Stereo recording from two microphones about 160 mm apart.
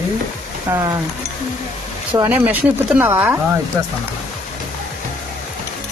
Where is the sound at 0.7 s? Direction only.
20° right (ahead or behind).